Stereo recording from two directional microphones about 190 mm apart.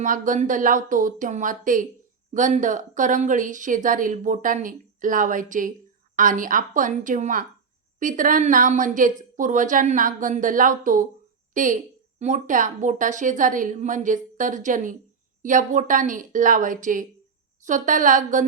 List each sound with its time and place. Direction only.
0.0 s a woman's voice: 45° right (ahead or behind)